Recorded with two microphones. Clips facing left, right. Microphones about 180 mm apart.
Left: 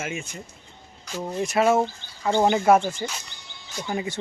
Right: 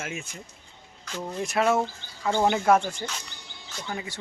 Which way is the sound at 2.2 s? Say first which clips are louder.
Left 3 dB; 15° left (ahead or behind).